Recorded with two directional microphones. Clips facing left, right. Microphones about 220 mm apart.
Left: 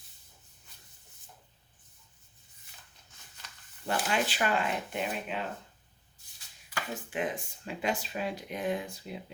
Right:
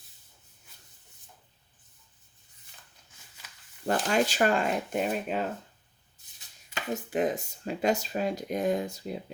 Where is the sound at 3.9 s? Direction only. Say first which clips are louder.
Right 5 dB; 40° right (ahead or behind).